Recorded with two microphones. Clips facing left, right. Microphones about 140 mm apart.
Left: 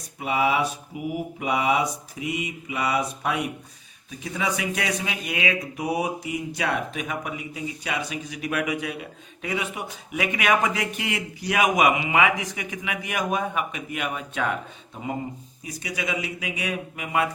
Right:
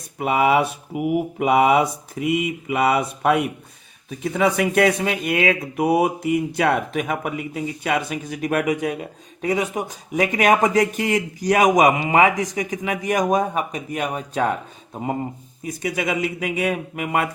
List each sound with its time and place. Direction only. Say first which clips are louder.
0.2 s mantra: right 5 dB; 55° right (ahead or behind)
4.2 s speech: right 8 dB; 55° right (ahead or behind); by 14.5 s 40° right (ahead or behind)
15.6 s speech: right 7 dB; 50° right (ahead or behind)